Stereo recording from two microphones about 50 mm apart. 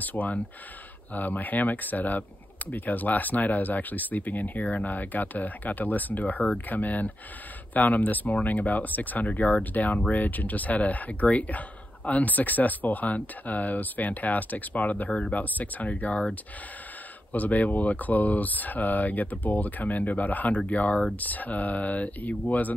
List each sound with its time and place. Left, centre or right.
0.0 s speech: left
17.3 s speech: left